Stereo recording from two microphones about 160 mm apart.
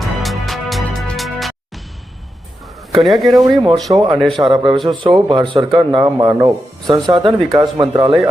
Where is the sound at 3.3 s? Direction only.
25° right (ahead or behind).